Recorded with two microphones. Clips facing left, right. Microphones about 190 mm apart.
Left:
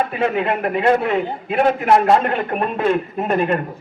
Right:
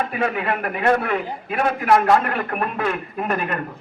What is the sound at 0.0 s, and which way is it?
A man's voice, 25° left (ahead or behind).